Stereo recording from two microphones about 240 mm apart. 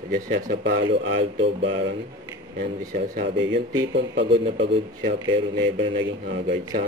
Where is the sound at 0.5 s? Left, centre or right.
Right.